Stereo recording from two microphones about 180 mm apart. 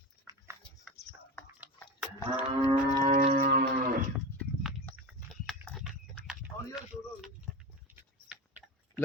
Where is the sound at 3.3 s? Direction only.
45° right (ahead or behind).